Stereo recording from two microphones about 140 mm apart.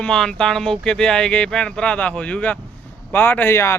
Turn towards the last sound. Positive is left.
turn(degrees=20)  # may be behind; listen again after turning